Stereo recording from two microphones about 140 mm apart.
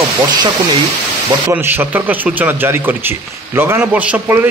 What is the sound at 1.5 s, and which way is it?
A man's voice, 15° right (ahead or behind).